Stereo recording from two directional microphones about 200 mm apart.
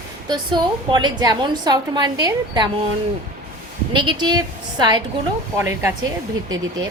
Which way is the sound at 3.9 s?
20° right (ahead or behind).